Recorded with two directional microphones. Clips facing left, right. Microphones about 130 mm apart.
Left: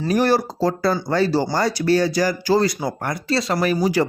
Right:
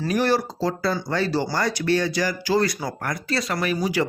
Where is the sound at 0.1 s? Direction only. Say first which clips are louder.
Left 4 dB; 40° left (ahead or behind).